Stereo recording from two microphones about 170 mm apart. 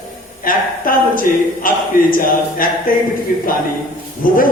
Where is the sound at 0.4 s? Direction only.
55° left (ahead or behind).